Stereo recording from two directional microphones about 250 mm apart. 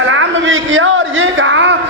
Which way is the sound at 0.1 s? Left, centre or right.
Right.